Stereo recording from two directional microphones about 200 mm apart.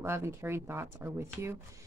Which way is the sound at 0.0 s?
10° right (ahead or behind).